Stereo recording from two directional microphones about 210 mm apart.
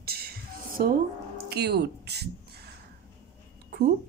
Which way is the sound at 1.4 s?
50° right (ahead or behind).